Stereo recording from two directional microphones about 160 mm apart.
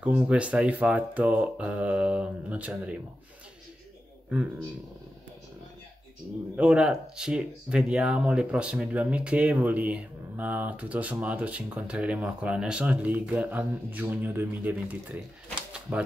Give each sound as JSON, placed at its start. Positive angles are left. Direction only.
{"t": 0.0, "sound": "speech", "side_deg": -10}
{"t": 6.5, "sound": "speech", "side_deg": -5}